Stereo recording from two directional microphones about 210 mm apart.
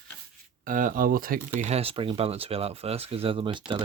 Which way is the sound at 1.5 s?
30° right (ahead or behind).